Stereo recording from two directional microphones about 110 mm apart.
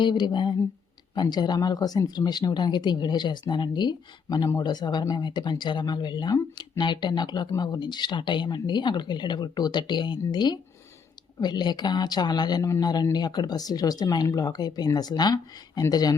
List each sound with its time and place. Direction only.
0.0 s speech: 45° left (ahead or behind)